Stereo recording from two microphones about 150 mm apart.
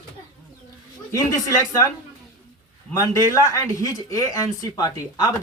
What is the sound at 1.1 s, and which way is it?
Speech, 20° left (ahead or behind).